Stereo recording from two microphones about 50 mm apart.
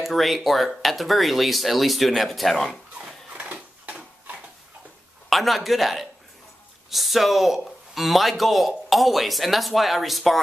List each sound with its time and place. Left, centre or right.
0.0 s speech: centre
3.8 s a sound: right
5.3 s speech: centre